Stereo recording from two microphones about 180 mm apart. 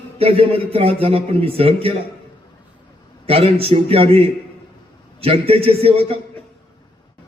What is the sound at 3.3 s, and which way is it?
A man's voice, 30° right (ahead or behind).